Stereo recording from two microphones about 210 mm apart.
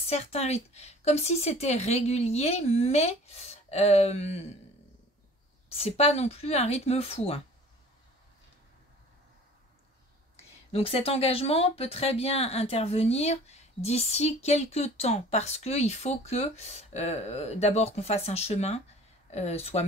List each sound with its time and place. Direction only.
0.0 s speech: 30° left (ahead or behind)
5.8 s speech: 30° left (ahead or behind)
10.3 s speech: 30° left (ahead or behind)